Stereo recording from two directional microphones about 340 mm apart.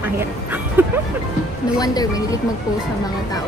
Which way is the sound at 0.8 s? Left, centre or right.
Centre.